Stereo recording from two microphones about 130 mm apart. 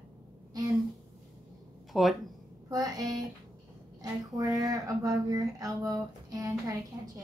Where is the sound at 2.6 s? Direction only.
30° right (ahead or behind).